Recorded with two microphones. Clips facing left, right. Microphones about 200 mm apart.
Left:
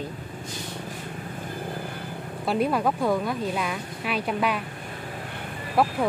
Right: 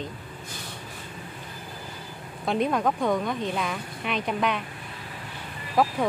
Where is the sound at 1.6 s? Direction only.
60° left (ahead or behind).